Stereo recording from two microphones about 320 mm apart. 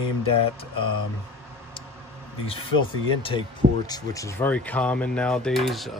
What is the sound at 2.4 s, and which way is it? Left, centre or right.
Speech, centre.